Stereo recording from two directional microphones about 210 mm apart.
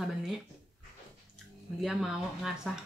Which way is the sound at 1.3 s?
Centre (ahead or behind).